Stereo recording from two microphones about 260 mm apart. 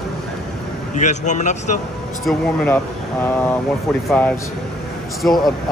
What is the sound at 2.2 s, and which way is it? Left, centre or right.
Speech, centre.